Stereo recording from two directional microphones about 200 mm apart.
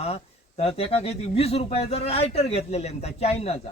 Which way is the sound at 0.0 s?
30° left (ahead or behind).